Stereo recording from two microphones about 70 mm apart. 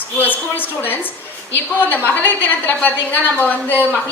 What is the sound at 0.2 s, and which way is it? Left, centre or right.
Speech, left.